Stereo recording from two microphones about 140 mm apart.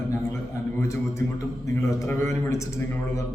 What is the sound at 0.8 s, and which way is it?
A man's voice, 20° left (ahead or behind).